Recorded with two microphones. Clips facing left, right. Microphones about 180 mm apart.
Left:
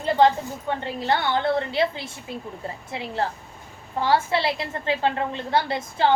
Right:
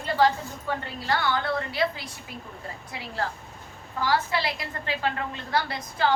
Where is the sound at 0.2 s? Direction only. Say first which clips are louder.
Left 4 dB; 25° left (ahead or behind).